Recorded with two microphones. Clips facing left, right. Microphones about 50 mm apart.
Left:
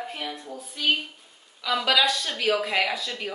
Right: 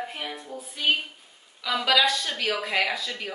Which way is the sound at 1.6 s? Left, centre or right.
Centre.